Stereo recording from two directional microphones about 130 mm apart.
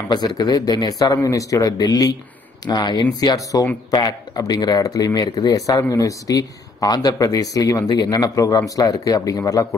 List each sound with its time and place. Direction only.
0.1 s speech: 30° left (ahead or behind)